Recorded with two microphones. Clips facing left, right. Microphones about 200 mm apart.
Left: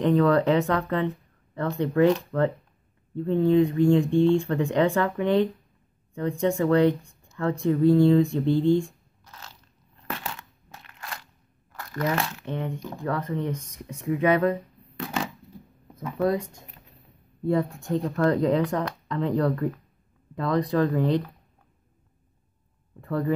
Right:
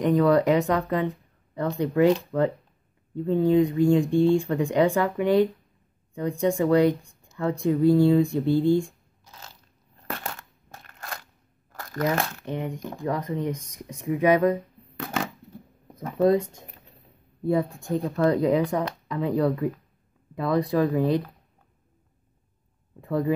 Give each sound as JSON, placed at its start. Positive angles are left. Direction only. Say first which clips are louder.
{"t": 0.0, "sound": "speech", "louder": "even", "side_deg": -10}
{"t": 10.0, "sound": "crumpling", "louder": "even", "side_deg": -45}
{"t": 12.4, "sound": "speech", "louder": "right 1 dB", "side_deg": -15}
{"t": 16.2, "sound": "speech", "louder": "right 4 dB", "side_deg": -20}
{"t": 17.5, "sound": "speech", "louder": "even", "side_deg": -10}
{"t": 22.9, "sound": "speech", "louder": "right 2 dB", "side_deg": -10}